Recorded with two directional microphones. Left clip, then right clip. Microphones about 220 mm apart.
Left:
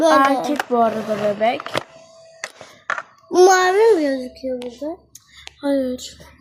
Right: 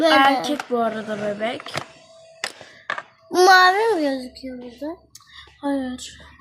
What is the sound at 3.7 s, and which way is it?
Speech, 15° right (ahead or behind).